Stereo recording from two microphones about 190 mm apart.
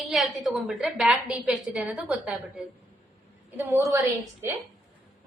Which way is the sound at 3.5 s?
10° right (ahead or behind).